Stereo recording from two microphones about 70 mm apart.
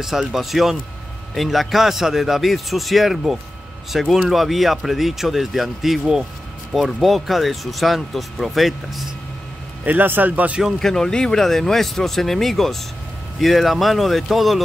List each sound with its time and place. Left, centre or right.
0.0 s speech: centre
9.8 s a man's voice: right
10.8 s speech: centre